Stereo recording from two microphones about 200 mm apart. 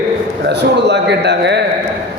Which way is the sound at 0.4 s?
60° right (ahead or behind).